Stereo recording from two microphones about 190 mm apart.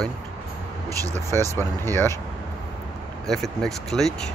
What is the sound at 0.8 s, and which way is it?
Speech, 20° right (ahead or behind).